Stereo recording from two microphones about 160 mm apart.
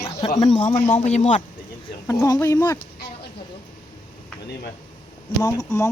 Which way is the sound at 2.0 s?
20° left (ahead or behind).